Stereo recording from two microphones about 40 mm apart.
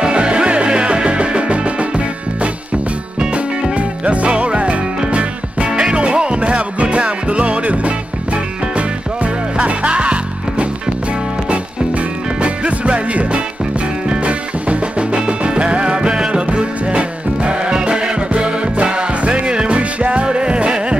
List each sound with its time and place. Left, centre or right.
0.0 s music: right
12.4 s music: right